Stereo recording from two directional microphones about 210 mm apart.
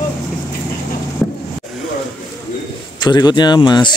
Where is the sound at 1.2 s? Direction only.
5° left (ahead or behind).